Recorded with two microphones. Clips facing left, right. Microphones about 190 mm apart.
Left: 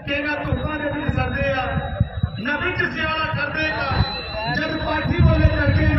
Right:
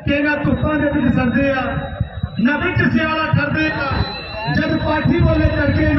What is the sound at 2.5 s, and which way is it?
Music, 65° right (ahead or behind).